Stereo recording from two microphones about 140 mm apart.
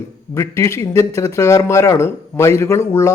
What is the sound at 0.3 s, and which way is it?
Speech, 20° left (ahead or behind).